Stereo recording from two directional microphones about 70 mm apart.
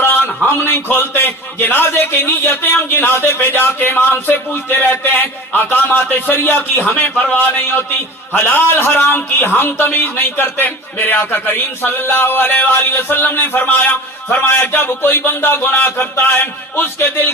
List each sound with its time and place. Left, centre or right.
0.4 s a man's voice: left